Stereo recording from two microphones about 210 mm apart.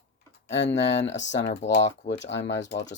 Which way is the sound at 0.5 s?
60° left (ahead or behind).